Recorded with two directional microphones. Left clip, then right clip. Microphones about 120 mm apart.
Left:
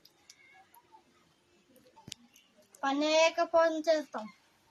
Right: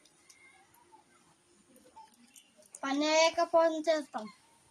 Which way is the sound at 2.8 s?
15° left (ahead or behind).